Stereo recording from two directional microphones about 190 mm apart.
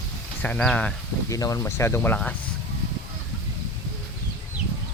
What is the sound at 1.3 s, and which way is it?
Speech, 15° left (ahead or behind).